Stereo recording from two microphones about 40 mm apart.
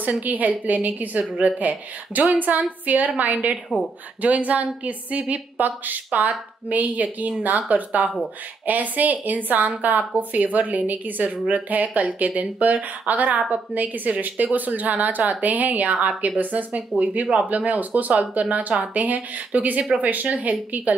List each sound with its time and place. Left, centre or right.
0.0 s a woman's voice: right